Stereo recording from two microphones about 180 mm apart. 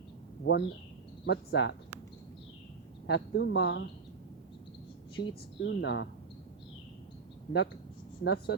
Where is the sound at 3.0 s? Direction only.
70° left (ahead or behind); by 3.9 s 90° left.